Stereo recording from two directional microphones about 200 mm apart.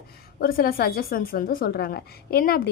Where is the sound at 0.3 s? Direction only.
45° left (ahead or behind).